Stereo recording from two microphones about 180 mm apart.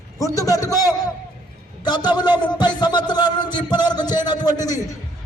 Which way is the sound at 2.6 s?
25° left (ahead or behind).